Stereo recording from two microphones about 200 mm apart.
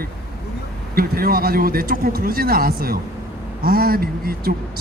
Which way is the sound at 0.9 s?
50° right (ahead or behind).